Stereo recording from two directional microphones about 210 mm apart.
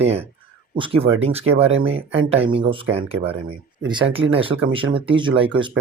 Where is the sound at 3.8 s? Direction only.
25° right (ahead or behind).